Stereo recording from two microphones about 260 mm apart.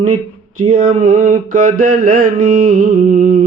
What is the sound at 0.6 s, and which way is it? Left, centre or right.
Mantra, right.